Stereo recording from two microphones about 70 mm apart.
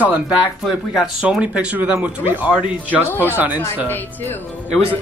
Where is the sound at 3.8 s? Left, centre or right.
Left.